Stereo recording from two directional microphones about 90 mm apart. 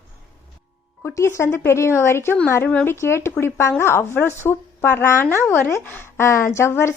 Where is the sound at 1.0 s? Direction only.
30° left (ahead or behind).